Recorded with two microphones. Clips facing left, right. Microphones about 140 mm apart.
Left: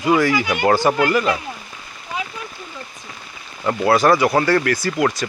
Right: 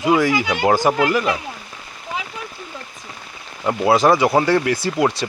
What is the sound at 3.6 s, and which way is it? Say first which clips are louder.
Speech: even; 15° right (ahead or behind).